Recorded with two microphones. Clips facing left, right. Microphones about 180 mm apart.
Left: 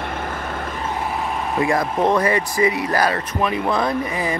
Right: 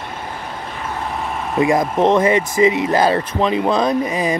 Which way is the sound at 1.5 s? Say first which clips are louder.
Right 5 dB; 20° right (ahead or behind).